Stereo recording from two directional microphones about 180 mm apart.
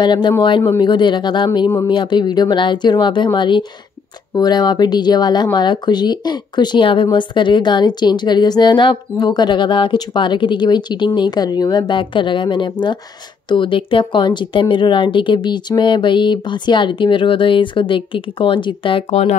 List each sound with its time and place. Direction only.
0.0 s speech: 25° left (ahead or behind)